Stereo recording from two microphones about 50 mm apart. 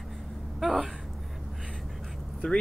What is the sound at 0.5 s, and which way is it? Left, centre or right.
Speech, centre.